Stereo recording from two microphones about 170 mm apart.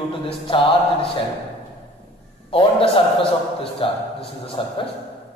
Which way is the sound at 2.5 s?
30° left (ahead or behind).